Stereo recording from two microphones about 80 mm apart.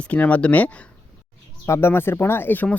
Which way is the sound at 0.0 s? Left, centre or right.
Centre.